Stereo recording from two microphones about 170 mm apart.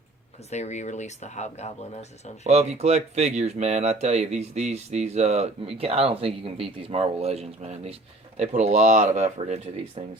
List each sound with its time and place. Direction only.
0.5 s speech: 45° left (ahead or behind)
2.4 s speech: 40° right (ahead or behind)